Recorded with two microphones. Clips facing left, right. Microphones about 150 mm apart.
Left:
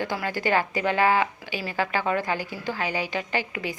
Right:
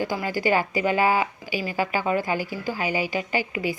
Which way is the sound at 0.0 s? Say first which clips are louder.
Right 2 dB; 5° right (ahead or behind).